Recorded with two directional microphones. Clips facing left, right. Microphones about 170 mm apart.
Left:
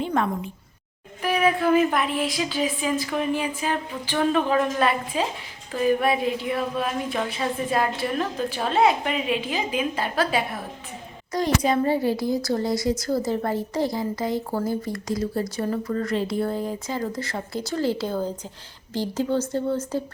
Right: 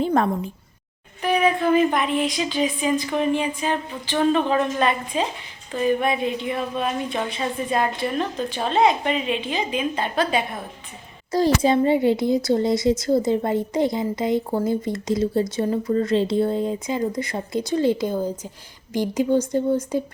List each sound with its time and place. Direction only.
0.0 s a woman's voice: 35° right (ahead or behind)
1.2 s speech: 5° left (ahead or behind)
11.3 s speech: 30° right (ahead or behind); by 20.0 s 15° right (ahead or behind)